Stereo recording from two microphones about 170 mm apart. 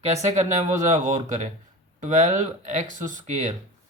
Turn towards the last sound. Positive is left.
turn(degrees=-45)  # may be behind; listen again after turning